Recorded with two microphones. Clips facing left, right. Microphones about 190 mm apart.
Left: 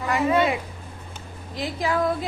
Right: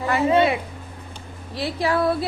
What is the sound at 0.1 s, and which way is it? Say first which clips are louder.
Speech: right 3 dB; 30° right (ahead or behind).